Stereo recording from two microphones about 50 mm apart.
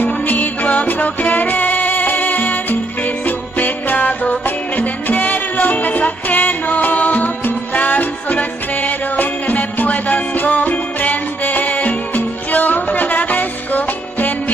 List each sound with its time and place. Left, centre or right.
0.0 s music: left